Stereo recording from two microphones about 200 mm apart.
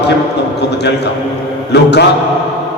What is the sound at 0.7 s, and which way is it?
A man's voice, 60° left (ahead or behind).